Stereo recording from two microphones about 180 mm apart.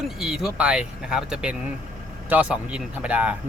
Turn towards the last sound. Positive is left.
turn(degrees=-5)  # may be behind; listen again after turning